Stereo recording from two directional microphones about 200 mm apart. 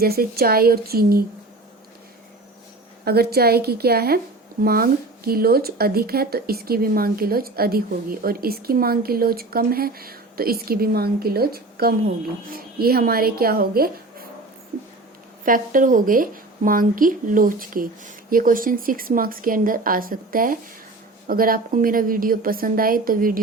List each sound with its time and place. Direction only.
0.0 s speech: 50° right (ahead or behind)
3.0 s speech: 50° right (ahead or behind)
15.4 s speech: 45° right (ahead or behind)